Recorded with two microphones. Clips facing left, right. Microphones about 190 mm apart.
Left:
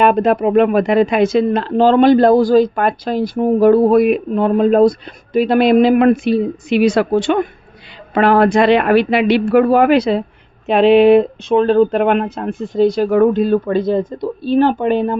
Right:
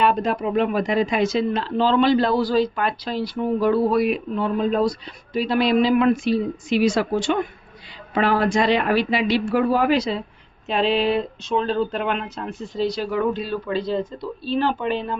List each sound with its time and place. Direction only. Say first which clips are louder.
0.0 s speech: left 8 dB; 55° left (ahead or behind)